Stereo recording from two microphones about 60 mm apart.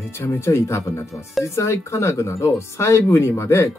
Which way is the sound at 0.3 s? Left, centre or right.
Left.